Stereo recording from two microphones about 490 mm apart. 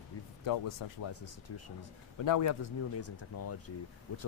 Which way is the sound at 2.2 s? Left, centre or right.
Left.